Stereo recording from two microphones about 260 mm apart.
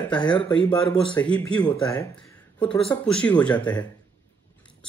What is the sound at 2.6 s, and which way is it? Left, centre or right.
Speech, centre.